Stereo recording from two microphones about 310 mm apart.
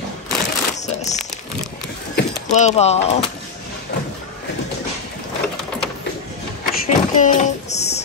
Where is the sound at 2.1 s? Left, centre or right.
Left.